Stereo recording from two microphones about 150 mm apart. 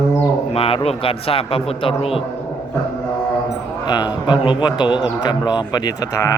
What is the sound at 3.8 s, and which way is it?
Speech, 30° left (ahead or behind).